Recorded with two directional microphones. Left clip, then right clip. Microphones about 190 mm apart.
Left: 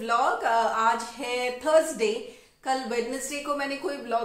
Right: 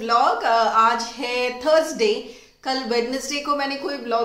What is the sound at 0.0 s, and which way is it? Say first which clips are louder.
A woman's voice: right 6 dB; 10° right (ahead or behind).